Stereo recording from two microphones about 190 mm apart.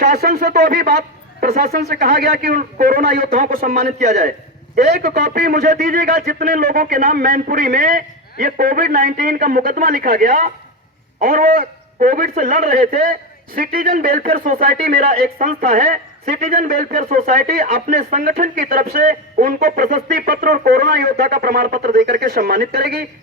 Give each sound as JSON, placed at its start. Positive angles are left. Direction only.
{"t": 0.0, "sound": "speech", "side_deg": -55}
{"t": 3.8, "sound": "a man's voice", "side_deg": -35}